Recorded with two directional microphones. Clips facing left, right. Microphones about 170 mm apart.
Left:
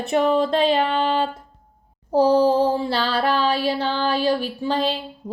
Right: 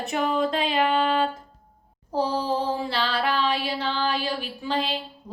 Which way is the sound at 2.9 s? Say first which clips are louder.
Left 4 dB; 35° left (ahead or behind).